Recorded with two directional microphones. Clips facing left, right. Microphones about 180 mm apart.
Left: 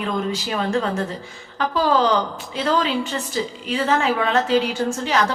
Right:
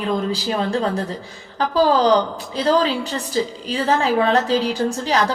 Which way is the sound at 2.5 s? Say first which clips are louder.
Right 3 dB; 35° right (ahead or behind).